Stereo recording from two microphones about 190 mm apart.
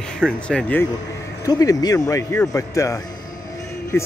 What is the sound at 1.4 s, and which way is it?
Speech, 20° left (ahead or behind).